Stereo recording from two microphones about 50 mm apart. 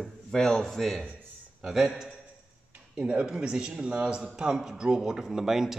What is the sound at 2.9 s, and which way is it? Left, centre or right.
A man's voice, right.